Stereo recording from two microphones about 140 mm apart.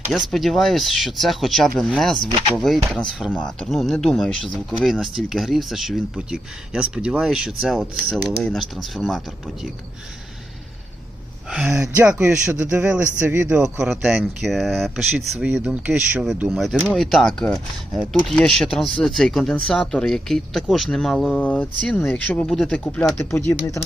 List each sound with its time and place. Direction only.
0.3 s speech: centre (ahead or behind)
11.7 s speech: 20° right (ahead or behind)
12.0 s speech: 10° right (ahead or behind); by 23.4 s 10° left (ahead or behind)
23.5 s speech: 20° left (ahead or behind)